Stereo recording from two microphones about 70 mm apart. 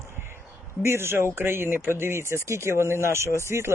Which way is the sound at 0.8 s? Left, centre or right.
Right.